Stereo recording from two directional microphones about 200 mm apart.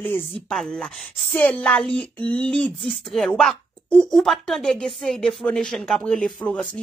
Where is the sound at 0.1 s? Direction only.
5° left (ahead or behind).